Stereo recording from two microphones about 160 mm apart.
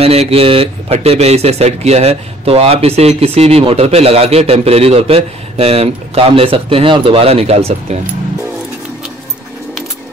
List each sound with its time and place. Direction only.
0.0 s speech: 40° right (ahead or behind)